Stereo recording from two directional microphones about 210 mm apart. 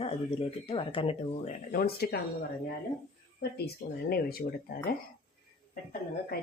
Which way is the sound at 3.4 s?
50° left (ahead or behind).